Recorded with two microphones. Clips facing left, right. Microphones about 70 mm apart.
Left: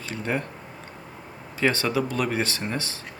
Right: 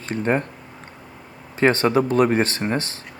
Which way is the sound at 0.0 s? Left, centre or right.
Right.